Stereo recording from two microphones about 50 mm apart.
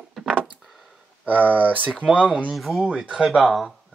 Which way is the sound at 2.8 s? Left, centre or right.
Right.